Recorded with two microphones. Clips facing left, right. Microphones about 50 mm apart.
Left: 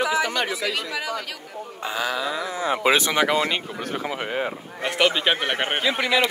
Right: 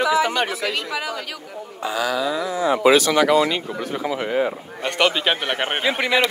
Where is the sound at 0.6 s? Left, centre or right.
Centre.